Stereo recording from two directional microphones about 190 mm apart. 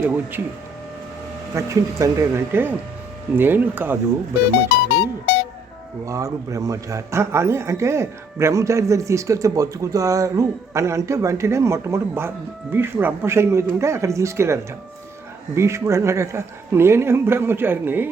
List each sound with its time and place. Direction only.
0.0 s a man's voice: 10° right (ahead or behind)
1.5 s a man's voice: 15° right (ahead or behind)
4.7 s music: 60° left (ahead or behind)
6.1 s a man's voice: 15° right (ahead or behind)